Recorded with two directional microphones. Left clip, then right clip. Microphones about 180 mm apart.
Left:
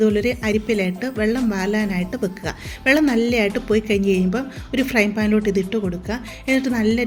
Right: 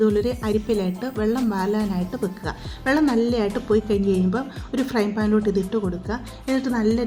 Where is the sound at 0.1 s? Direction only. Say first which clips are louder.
Left 2 dB; 45° left (ahead or behind).